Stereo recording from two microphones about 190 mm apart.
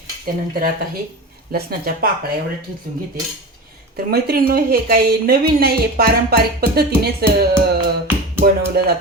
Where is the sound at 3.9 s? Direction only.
55° right (ahead or behind).